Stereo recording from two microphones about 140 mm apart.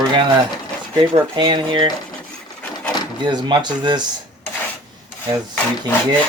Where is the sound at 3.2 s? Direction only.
30° right (ahead or behind).